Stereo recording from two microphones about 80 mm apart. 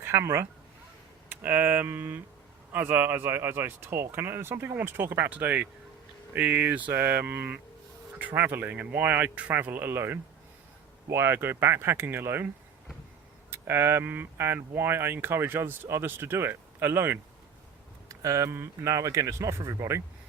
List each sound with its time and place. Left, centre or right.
0.0 s speech: right
1.3 s speech: right
13.5 s speech: right
18.1 s speech: right
18.5 s speech: right